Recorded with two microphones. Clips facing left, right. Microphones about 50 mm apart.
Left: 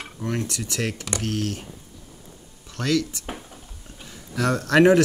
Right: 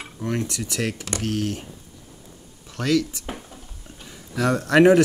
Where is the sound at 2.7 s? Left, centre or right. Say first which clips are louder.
Right 2 dB; centre.